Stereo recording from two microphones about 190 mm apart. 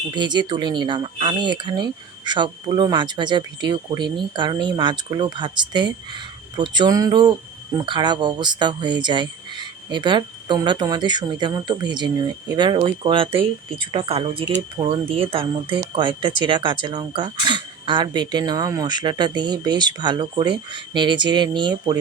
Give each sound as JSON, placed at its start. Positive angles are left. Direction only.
{"t": 0.1, "sound": "speech", "side_deg": -25}